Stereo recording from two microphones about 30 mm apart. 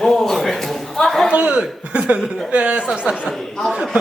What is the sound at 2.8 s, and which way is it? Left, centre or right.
Speech, right.